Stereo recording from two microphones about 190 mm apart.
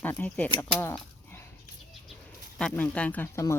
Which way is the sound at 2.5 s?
5° left (ahead or behind).